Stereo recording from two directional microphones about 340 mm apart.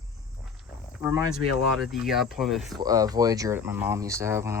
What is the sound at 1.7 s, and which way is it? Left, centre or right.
Speech, centre.